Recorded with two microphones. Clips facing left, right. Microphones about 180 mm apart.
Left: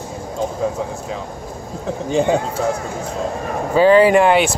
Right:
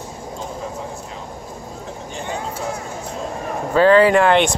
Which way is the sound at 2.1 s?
90° left.